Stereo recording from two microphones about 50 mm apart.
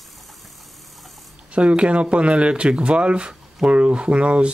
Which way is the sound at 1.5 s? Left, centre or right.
Right.